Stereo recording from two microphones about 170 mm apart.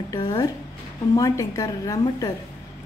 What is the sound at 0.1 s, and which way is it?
A woman's voice, 25° left (ahead or behind).